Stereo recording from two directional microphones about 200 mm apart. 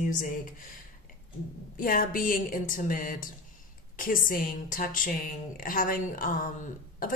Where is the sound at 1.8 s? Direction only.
45° left (ahead or behind).